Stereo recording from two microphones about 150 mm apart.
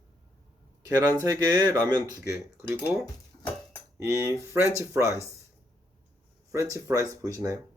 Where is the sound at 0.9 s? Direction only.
20° right (ahead or behind).